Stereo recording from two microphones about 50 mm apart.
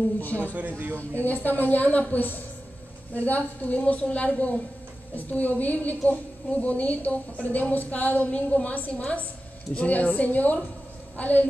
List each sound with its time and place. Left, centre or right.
0.6 s speech: right
1.2 s a woman's voice: left